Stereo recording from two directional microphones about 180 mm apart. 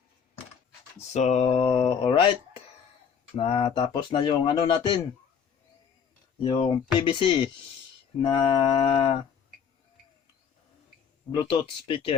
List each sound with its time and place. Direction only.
0.9 s a sound: 40° left (ahead or behind)
1.5 s speech: 25° left (ahead or behind)
6.4 s speech: 30° left (ahead or behind)
11.4 s speech: 30° left (ahead or behind)